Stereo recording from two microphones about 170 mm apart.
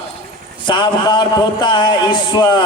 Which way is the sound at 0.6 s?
25° left (ahead or behind).